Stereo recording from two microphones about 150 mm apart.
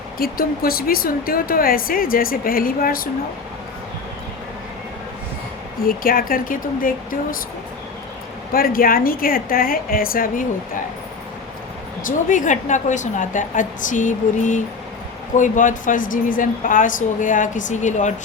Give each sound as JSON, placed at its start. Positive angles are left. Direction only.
{"t": 0.2, "sound": "speech", "side_deg": 80}
{"t": 5.8, "sound": "speech", "side_deg": 75}
{"t": 8.5, "sound": "speech", "side_deg": 75}
{"t": 12.0, "sound": "a woman's voice", "side_deg": 60}